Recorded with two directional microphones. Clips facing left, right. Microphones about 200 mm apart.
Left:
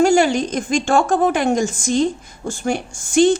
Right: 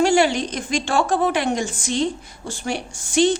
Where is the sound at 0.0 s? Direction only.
45° left (ahead or behind).